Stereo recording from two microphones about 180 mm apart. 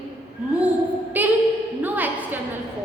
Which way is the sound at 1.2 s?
10° right (ahead or behind).